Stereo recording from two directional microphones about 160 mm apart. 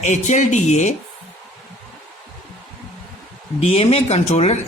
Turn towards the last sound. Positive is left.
turn(degrees=45)  # may be behind; listen again after turning